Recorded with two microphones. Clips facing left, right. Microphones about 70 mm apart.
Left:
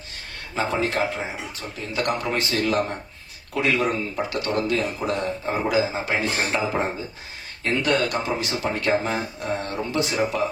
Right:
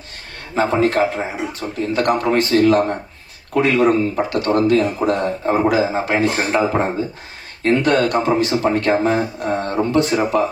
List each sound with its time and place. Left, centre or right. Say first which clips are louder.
0.6 s speech: right 8 dB; right
7.6 s speech: right 7 dB; right